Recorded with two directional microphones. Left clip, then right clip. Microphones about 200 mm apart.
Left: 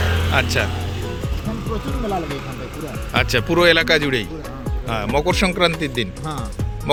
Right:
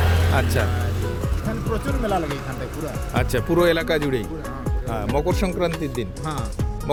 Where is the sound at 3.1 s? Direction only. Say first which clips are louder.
Left 4 dB; 5° right (ahead or behind).